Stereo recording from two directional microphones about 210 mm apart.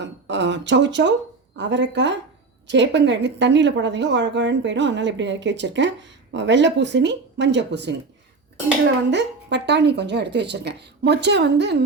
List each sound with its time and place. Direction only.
0.0 s a woman's voice: 60° right (ahead or behind)
9.0 s a woman's voice: 55° right (ahead or behind)